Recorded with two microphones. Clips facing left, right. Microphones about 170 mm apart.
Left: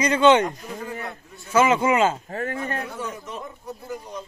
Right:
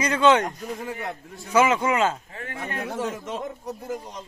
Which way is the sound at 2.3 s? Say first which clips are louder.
Left 6 dB; 40° left (ahead or behind).